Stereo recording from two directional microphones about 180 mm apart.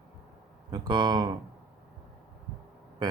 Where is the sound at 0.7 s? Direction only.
25° right (ahead or behind).